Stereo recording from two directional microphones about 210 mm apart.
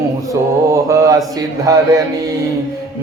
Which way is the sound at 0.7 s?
15° right (ahead or behind).